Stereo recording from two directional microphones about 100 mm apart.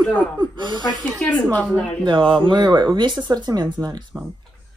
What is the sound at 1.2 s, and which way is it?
Speech, 15° left (ahead or behind).